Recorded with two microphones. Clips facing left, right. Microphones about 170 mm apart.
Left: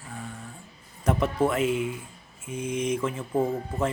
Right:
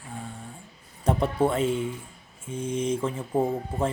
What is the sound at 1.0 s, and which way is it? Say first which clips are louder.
Speech: right 1 dB; 30° right (ahead or behind).